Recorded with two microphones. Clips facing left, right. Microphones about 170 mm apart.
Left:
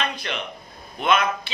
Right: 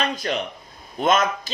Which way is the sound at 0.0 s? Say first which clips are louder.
Right 4 dB; 40° right (ahead or behind).